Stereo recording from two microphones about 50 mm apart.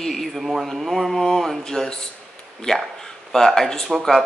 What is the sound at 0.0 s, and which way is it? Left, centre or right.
Speech, centre.